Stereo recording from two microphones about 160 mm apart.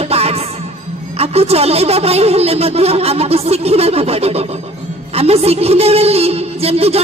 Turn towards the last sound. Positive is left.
turn(degrees=-40)  # may be behind; listen again after turning